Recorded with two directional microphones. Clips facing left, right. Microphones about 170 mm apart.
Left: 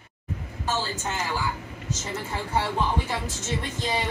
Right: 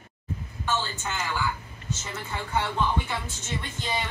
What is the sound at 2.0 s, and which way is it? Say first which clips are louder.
Speech: left 5 dB; 40° left (ahead or behind).